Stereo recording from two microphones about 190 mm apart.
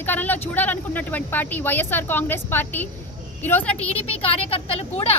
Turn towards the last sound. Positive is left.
turn(degrees=30)  # may be behind; listen again after turning